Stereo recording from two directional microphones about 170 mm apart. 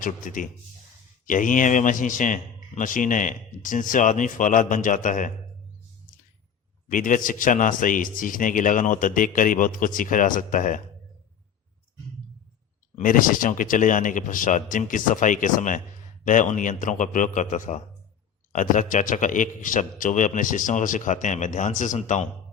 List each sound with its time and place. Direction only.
0.0 s a man's voice: 50° left (ahead or behind)
6.8 s a man's voice: 50° left (ahead or behind)
13.0 s a man's voice: 55° left (ahead or behind)